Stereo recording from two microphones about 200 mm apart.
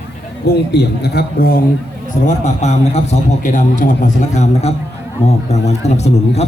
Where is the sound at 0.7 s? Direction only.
55° left (ahead or behind).